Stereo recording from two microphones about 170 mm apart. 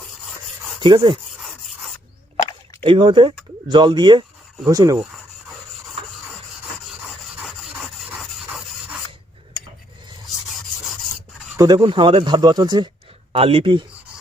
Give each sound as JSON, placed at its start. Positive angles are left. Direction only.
{"t": 0.8, "sound": "speech", "side_deg": -25}
{"t": 2.3, "sound": "a sound", "side_deg": 35}
{"t": 2.8, "sound": "speech", "side_deg": -30}
{"t": 7.4, "sound": "rub", "side_deg": 0}
{"t": 11.5, "sound": "speech", "side_deg": -25}